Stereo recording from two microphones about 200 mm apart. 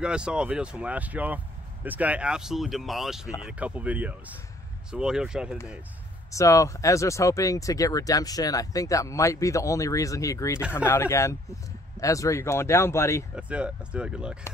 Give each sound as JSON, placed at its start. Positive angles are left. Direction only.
{"t": 0.0, "sound": "speech", "side_deg": -5}
{"t": 6.3, "sound": "speech", "side_deg": 15}
{"t": 13.4, "sound": "speech", "side_deg": -5}